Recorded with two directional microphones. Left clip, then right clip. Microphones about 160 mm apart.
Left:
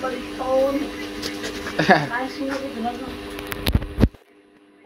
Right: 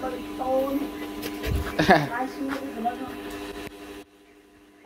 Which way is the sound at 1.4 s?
30° right (ahead or behind).